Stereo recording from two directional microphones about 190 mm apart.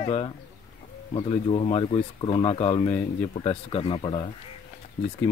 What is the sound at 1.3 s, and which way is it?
Speech, 30° left (ahead or behind).